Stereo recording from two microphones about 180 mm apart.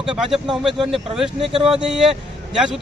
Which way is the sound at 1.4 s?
30° right (ahead or behind).